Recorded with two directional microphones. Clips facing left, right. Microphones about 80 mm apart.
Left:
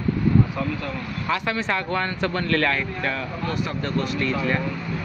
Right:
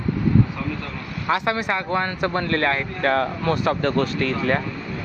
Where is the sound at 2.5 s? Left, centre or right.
Right.